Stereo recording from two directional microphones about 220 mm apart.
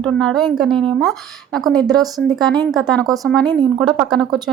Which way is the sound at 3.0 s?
15° right (ahead or behind).